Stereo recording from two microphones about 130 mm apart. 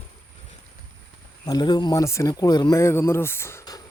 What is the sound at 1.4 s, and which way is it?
Speech, 30° left (ahead or behind).